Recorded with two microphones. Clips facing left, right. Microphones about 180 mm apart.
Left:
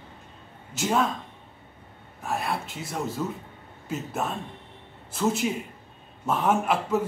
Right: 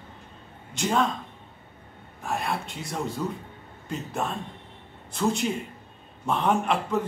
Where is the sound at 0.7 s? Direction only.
5° left (ahead or behind).